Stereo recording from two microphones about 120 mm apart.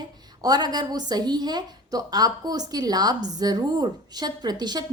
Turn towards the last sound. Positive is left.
turn(degrees=-35)  # may be behind; listen again after turning